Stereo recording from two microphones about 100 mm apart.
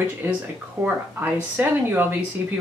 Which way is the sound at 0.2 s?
25° right (ahead or behind).